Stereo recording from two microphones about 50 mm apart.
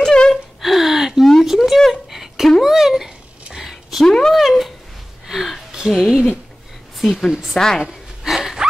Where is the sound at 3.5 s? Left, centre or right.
Centre.